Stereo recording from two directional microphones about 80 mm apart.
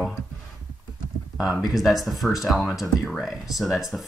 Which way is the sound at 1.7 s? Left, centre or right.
Centre.